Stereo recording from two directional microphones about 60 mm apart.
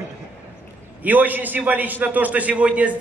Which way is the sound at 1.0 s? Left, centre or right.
Right.